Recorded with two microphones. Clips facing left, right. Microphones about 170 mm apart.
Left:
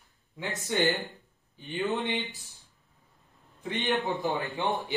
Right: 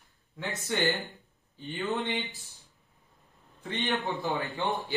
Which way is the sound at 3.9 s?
Centre (ahead or behind).